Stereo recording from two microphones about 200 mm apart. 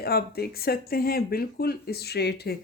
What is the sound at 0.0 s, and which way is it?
Speech, 50° left (ahead or behind).